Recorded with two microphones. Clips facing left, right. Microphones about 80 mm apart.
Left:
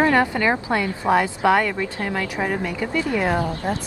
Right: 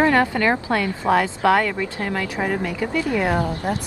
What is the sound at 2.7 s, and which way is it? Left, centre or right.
A woman's voice, centre.